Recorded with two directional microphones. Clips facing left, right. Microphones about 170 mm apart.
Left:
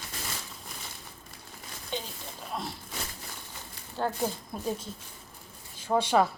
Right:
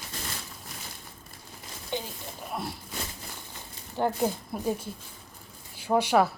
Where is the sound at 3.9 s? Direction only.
15° right (ahead or behind).